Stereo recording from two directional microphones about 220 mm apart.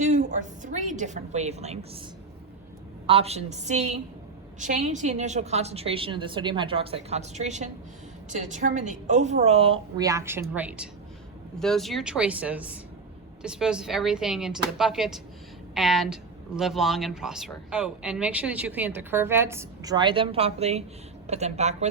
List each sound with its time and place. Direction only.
0.0 s a woman's voice: 35° right (ahead or behind)
3.1 s a woman's voice: 25° right (ahead or behind)